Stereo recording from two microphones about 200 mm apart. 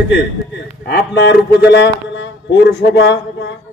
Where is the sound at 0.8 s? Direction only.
60° left (ahead or behind).